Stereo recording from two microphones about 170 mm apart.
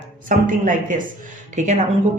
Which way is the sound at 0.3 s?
50° right (ahead or behind).